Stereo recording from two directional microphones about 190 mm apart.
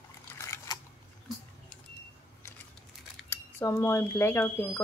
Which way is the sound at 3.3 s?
15° left (ahead or behind).